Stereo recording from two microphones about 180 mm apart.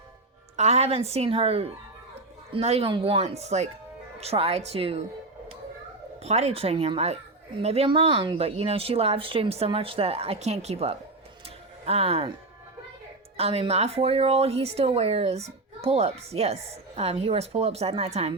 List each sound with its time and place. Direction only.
0.5 s speech: 40° right (ahead or behind)
6.2 s speech: 35° right (ahead or behind)
11.4 s a sound: 35° right (ahead or behind)
13.3 s speech: 35° right (ahead or behind)